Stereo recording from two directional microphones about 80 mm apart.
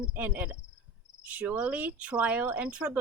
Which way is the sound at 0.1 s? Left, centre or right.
Centre.